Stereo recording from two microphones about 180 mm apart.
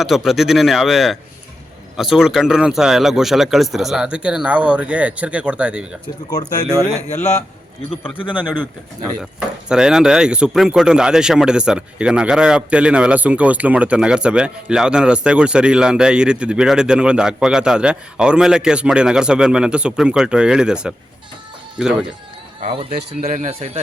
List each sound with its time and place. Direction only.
0.0 s speech: centre (ahead or behind)
6.8 s speech: 5° left (ahead or behind)
9.2 s speech: 5° right (ahead or behind)
22.7 s a man's voice: 30° right (ahead or behind)
23.2 s a man's voice: 45° right (ahead or behind)